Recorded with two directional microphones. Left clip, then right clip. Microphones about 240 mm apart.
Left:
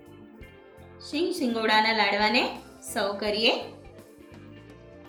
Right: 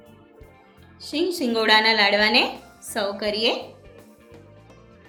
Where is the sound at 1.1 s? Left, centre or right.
Right.